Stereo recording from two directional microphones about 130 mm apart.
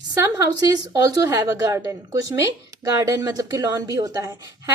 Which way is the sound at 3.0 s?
25° right (ahead or behind).